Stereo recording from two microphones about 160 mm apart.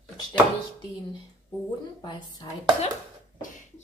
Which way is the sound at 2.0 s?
30° left (ahead or behind).